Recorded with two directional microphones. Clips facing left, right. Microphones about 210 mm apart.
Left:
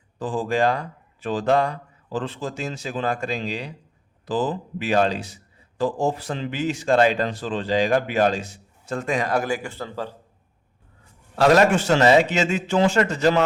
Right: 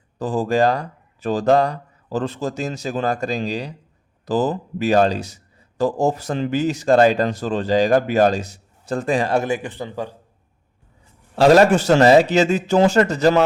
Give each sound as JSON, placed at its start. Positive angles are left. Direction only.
{"t": 0.2, "sound": "a man's voice", "side_deg": -40}
{"t": 11.3, "sound": "a man's voice", "side_deg": -30}